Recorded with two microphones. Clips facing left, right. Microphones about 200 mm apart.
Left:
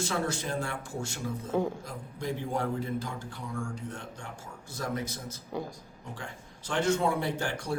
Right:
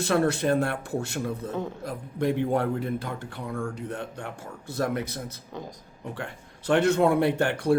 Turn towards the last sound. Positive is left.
turn(degrees=-60)  # may be behind; listen again after turning